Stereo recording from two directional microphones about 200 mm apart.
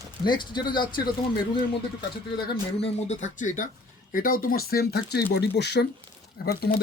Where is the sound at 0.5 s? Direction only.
20° left (ahead or behind).